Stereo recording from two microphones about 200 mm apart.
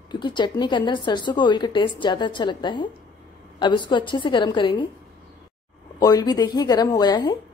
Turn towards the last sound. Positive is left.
turn(degrees=20)  # may be behind; listen again after turning